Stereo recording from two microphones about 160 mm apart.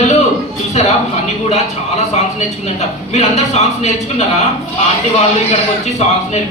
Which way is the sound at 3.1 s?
45° left (ahead or behind).